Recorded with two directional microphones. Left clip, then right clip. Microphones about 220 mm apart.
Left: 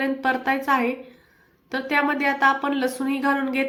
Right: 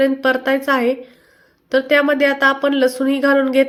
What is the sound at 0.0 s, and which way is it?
A woman's voice, 15° right (ahead or behind).